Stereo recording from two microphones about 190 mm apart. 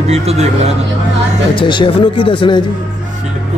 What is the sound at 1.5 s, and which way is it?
Speech, 25° left (ahead or behind).